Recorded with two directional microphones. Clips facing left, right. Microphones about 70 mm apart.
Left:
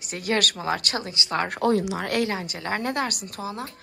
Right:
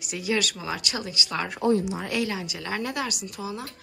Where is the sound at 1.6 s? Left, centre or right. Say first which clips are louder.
Right 1 dB; left.